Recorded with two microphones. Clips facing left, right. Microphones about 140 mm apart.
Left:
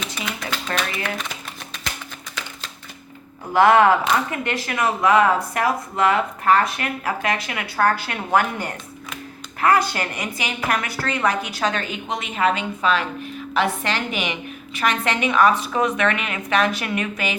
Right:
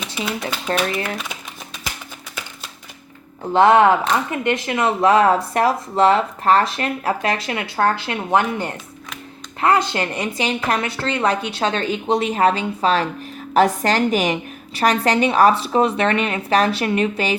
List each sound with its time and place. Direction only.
0.3 s a woman's voice: 30° right (ahead or behind)
3.5 s a woman's voice: 20° right (ahead or behind)